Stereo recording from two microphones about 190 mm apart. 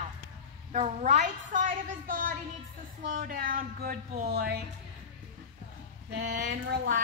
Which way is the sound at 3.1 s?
50° right (ahead or behind).